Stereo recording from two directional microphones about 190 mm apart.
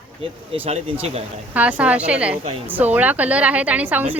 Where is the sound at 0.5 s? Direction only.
35° right (ahead or behind).